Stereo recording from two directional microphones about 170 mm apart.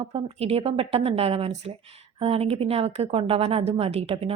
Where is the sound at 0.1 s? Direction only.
35° right (ahead or behind).